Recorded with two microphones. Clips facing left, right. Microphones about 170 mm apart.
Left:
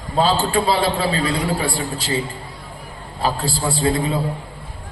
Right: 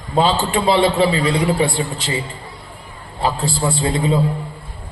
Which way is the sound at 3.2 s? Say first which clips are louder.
Right 2 dB; 25° right (ahead or behind).